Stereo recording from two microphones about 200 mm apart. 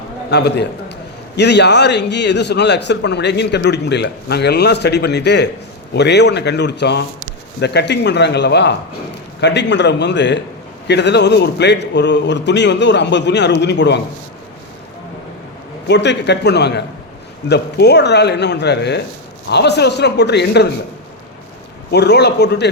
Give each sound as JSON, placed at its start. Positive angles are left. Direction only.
{"t": 0.3, "sound": "a man's voice", "side_deg": 55}
{"t": 15.9, "sound": "a man's voice", "side_deg": 60}
{"t": 21.9, "sound": "a man's voice", "side_deg": 55}